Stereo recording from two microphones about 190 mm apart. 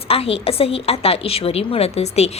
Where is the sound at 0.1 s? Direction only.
30° left (ahead or behind).